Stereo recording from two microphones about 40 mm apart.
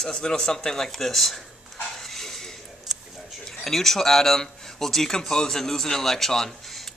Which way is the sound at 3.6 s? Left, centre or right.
Centre.